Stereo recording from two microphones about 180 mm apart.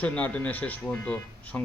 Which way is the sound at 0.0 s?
10° left (ahead or behind).